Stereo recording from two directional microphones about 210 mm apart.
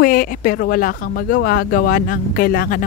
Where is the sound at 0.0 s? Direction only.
40° left (ahead or behind).